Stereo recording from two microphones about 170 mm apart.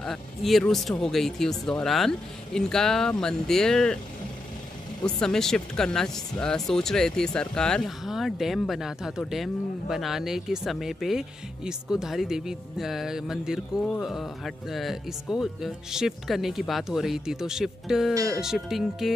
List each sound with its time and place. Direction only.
0.0 s speech: centre (ahead or behind)
5.0 s speech: 5° left (ahead or behind)